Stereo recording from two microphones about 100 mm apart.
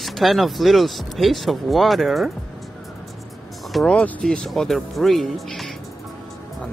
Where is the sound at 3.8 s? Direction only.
10° left (ahead or behind).